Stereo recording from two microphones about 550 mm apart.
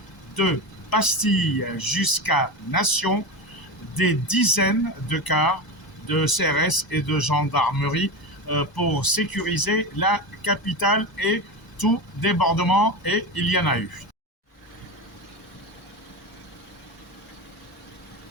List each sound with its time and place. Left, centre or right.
0.3 s speech: left